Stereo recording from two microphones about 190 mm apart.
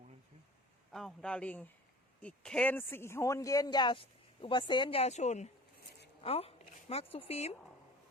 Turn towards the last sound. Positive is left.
turn(degrees=30)  # may be behind; listen again after turning